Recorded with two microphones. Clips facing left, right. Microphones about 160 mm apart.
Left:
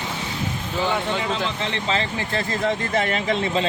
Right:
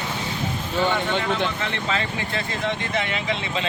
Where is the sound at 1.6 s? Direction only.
25° left (ahead or behind).